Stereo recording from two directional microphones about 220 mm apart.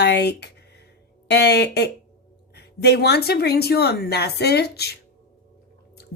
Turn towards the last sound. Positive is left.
turn(degrees=45)  # may be behind; listen again after turning